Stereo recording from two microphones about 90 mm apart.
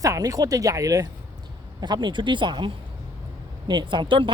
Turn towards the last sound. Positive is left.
turn(degrees=-70)  # may be behind; listen again after turning